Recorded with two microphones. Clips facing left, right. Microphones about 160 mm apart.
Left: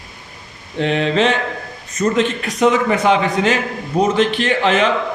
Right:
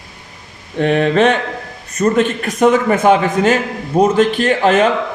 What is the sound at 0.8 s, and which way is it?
A man's voice, 55° right (ahead or behind).